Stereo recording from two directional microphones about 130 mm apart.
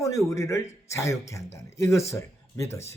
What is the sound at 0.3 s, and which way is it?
A man's voice, 25° left (ahead or behind).